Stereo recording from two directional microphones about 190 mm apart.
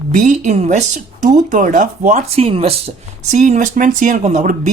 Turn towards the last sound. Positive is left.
turn(degrees=-40)  # may be behind; listen again after turning